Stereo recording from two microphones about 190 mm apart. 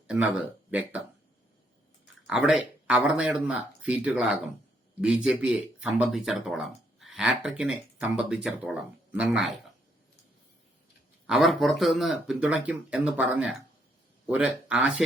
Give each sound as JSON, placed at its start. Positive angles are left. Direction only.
{"t": 0.7, "sound": "speech", "side_deg": -10}
{"t": 2.2, "sound": "speech", "side_deg": -5}
{"t": 11.3, "sound": "speech", "side_deg": 0}